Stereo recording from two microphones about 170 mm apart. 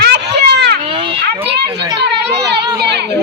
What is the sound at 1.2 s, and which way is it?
A child's voice, 75° right (ahead or behind).